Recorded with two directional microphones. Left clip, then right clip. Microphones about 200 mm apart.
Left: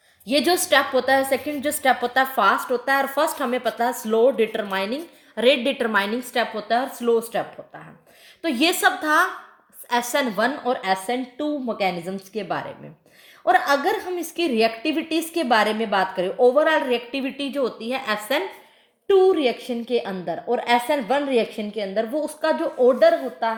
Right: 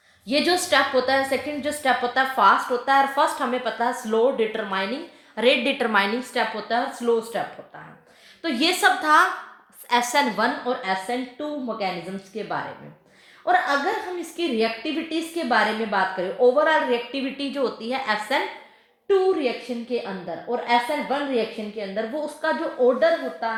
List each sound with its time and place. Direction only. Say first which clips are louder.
0.3 s a woman's voice: left 2 dB; 45° left (ahead or behind)
5.4 s a woman's voice: left 1 dB; 35° left (ahead or behind)
12.3 s a woman's voice: left 1 dB; 45° left (ahead or behind)
19.0 s a woman's voice: left 3 dB; 55° left (ahead or behind)